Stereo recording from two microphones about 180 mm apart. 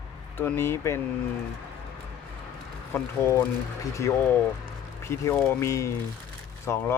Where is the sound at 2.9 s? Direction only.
15° left (ahead or behind).